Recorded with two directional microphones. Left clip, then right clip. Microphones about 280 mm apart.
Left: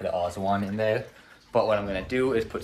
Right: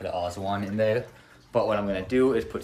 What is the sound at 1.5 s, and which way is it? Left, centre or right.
Speech, centre.